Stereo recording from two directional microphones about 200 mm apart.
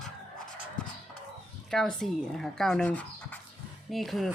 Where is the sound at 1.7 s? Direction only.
Centre (ahead or behind).